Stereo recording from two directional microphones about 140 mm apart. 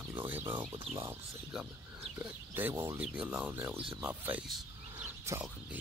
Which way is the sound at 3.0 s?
10° right (ahead or behind).